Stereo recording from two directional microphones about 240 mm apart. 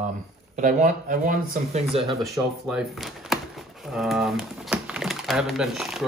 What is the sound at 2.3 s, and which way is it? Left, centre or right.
Speech, centre.